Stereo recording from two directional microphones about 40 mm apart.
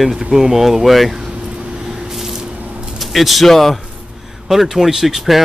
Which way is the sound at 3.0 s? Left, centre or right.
Centre.